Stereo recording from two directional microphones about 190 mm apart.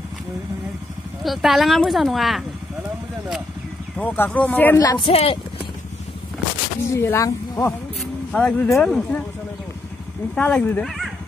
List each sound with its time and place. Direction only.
1.2 s speech: centre (ahead or behind)
3.9 s speech: 10° left (ahead or behind)
5.1 s speech: 30° left (ahead or behind)
6.9 s speech: 15° left (ahead or behind)
8.0 s vehicle: 5° left (ahead or behind)
8.8 s speech: 5° left (ahead or behind)
10.3 s speech: 5° left (ahead or behind)